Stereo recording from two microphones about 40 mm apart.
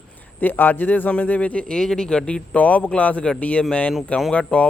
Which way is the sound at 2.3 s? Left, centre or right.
Left.